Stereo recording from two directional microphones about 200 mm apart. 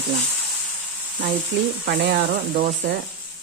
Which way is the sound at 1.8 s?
50° right (ahead or behind).